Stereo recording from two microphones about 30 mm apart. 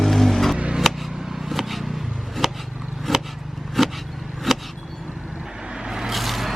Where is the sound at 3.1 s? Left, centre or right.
Centre.